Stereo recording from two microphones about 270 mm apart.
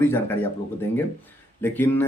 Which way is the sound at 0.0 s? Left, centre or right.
Centre.